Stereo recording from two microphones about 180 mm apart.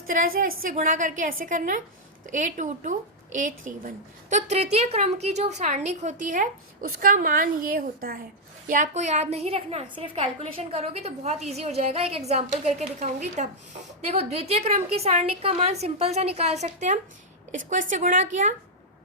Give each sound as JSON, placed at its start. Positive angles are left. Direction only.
{"t": 0.1, "sound": "a woman's voice", "side_deg": -50}
{"t": 8.6, "sound": "a woman's voice", "side_deg": -45}